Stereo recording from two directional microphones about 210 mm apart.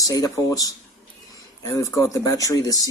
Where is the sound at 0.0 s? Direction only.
15° left (ahead or behind).